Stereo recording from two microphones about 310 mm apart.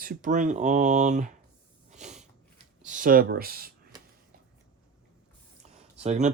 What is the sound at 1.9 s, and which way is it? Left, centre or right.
Snort, right.